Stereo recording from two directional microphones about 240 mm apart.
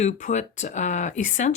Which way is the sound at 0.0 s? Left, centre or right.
Left.